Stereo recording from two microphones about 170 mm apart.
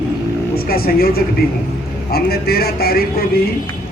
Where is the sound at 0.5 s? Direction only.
60° left (ahead or behind).